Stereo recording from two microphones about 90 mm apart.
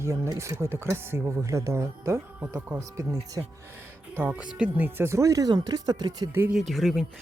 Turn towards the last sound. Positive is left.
turn(degrees=0)  # may be behind; listen again after turning